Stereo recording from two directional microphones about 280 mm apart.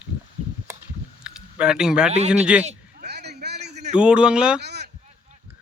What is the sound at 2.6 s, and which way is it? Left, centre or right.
Bleat, right.